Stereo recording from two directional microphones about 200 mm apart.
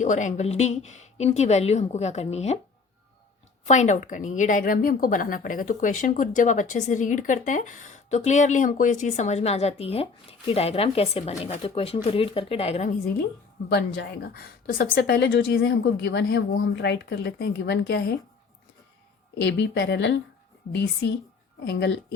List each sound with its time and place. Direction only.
0.0 s a woman's voice: 40° left (ahead or behind)
3.7 s a woman's voice: 35° left (ahead or behind)
13.7 s a woman's voice: 55° left (ahead or behind)
19.4 s a woman's voice: 65° left (ahead or behind)